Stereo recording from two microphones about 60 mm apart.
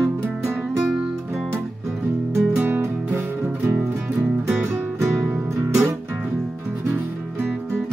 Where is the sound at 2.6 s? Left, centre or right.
Right.